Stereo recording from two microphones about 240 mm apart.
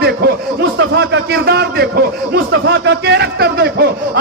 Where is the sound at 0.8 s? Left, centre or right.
Right.